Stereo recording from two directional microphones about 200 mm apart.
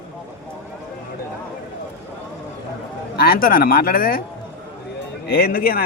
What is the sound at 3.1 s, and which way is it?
Speech, 50° left (ahead or behind).